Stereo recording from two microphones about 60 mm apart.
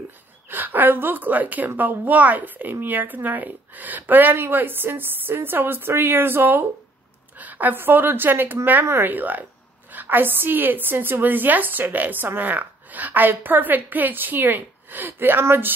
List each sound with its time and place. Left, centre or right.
0.5 s a woman's voice: right
9.1 s a woman's voice: right